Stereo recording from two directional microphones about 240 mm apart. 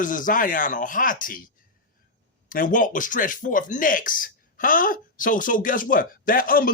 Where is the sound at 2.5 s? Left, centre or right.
Left.